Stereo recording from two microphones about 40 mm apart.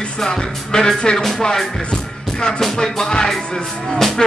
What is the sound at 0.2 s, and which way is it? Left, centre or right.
Music, centre.